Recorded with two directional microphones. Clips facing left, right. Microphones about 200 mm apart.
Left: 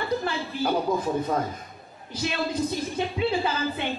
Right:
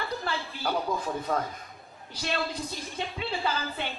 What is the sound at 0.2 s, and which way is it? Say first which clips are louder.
Speech: left 5 dB; 20° left (ahead or behind).